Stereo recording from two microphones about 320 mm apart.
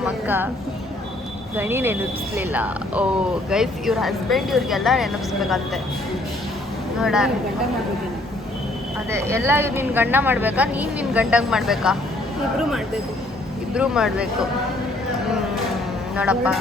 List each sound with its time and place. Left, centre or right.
0.0 s speech: centre
1.5 s speech: centre
7.0 s speech: centre
9.0 s speech: centre
13.7 s speech: centre
16.1 s speech: centre